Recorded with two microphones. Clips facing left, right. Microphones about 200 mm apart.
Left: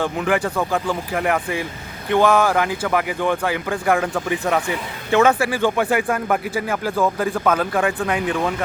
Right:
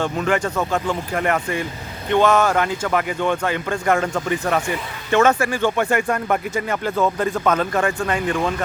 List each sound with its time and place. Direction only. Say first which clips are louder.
0.0 s speech: even; 10° left (ahead or behind)